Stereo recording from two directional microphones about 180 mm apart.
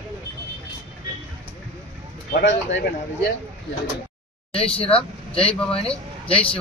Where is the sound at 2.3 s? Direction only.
75° left (ahead or behind).